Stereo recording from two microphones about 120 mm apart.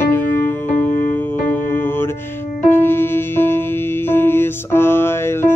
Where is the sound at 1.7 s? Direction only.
15° left (ahead or behind).